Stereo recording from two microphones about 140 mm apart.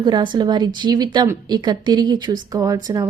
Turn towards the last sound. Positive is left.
turn(degrees=-25)  # may be behind; listen again after turning